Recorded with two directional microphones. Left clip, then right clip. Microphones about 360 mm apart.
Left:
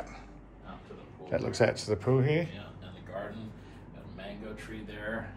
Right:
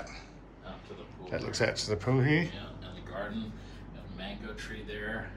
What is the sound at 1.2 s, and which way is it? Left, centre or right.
A man's voice, centre.